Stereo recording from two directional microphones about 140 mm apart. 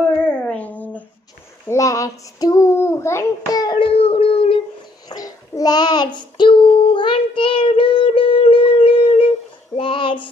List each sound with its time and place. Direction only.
0.3 s a sound: 10° left (ahead or behind)
1.7 s child singing: 25° left (ahead or behind); by 4.6 s 40° left (ahead or behind)
5.1 s child singing: 25° left (ahead or behind)